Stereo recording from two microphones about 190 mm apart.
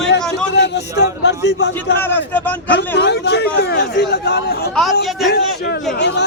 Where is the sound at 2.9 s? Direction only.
60° left (ahead or behind).